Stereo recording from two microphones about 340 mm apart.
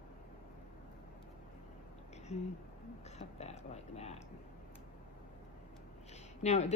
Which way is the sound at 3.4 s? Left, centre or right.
Centre.